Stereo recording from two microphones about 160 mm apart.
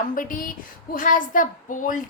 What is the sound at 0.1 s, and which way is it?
A woman's voice, 55° left (ahead or behind).